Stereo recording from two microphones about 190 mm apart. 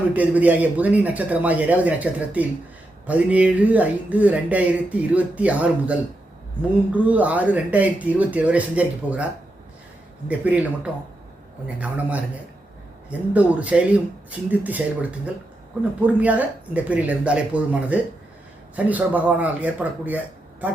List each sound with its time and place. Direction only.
0.1 s speech: 10° right (ahead or behind)
11.8 s speech: 10° right (ahead or behind)
16.2 s speech: 10° right (ahead or behind)